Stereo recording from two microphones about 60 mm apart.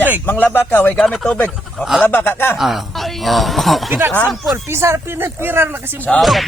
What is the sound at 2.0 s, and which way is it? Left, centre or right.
Speech, left.